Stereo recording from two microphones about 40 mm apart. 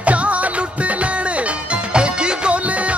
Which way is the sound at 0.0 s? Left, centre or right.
Right.